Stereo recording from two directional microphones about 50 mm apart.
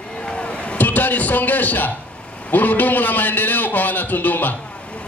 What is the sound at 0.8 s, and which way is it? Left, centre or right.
A man's voice, left.